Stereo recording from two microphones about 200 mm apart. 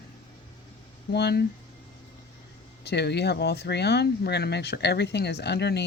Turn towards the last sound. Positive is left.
turn(degrees=55)  # may be behind; listen again after turning